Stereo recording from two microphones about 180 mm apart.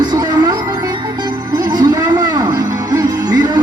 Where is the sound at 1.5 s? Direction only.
20° right (ahead or behind).